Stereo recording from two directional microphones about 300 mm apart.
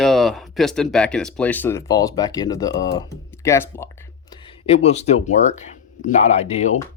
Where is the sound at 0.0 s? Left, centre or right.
Centre.